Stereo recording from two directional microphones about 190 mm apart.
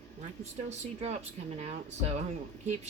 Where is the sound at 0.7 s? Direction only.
35° right (ahead or behind).